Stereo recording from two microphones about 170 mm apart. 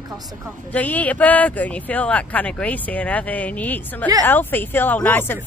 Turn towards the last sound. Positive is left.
turn(degrees=10)  # may be behind; listen again after turning